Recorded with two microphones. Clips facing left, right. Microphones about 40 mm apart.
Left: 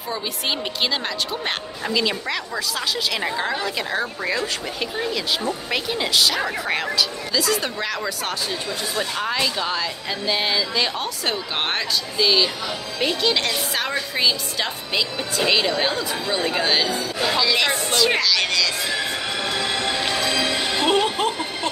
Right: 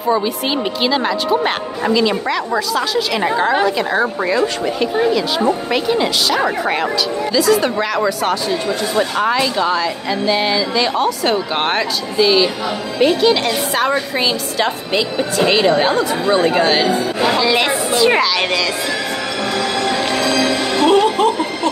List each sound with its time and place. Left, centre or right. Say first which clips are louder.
0.8 s speech: right 9 dB; centre
3.6 s a woman's voice: right 8 dB; centre
5.7 s speech: right 7 dB; centre
8.9 s speech: right 9 dB; right
9.3 s a woman's voice: right 7 dB; centre
19.5 s music: right 7 dB; right
20.9 s music: right 8 dB; centre